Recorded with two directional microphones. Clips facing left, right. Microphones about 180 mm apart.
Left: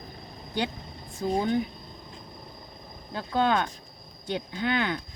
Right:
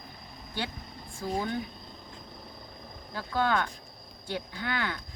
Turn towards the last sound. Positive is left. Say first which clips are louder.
# left 6 dB
turn(degrees=20)  # may be behind; listen again after turning